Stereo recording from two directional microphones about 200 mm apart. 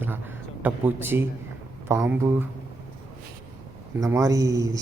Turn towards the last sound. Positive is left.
turn(degrees=-15)  # may be behind; listen again after turning